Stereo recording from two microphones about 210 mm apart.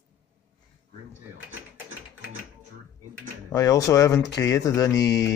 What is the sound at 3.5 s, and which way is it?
Speech, 15° left (ahead or behind).